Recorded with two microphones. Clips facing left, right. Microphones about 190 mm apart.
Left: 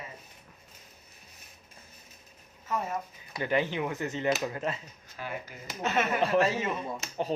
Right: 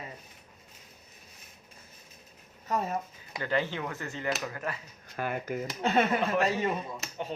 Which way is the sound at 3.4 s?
15° left (ahead or behind).